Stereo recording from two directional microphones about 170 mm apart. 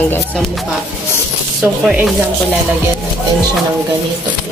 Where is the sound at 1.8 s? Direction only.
5° right (ahead or behind).